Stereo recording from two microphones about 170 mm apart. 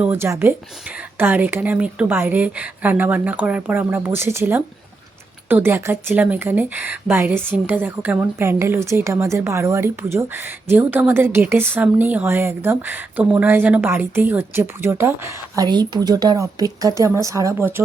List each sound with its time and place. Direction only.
0.0 s speech: 15° right (ahead or behind)